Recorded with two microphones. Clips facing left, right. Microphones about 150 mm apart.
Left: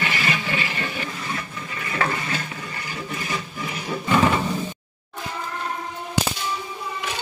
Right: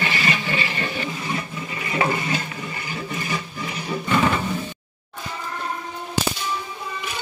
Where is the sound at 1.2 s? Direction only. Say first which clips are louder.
Right 3 dB; 15° right (ahead or behind).